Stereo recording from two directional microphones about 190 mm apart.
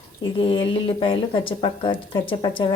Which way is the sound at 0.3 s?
30° left (ahead or behind).